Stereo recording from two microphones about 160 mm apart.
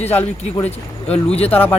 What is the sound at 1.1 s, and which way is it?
Speech, 40° left (ahead or behind).